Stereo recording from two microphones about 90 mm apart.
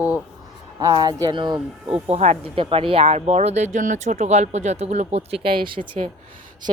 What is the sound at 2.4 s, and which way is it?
Speech, 85° right.